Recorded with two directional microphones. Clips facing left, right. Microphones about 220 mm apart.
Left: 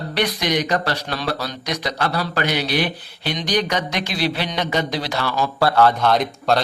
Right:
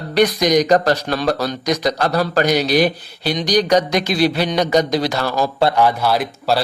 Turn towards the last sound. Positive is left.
turn(degrees=-5)  # may be behind; listen again after turning